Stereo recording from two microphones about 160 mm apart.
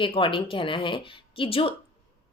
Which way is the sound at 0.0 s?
35° left (ahead or behind).